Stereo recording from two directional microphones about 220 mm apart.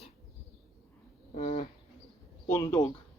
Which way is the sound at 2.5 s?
15° left (ahead or behind).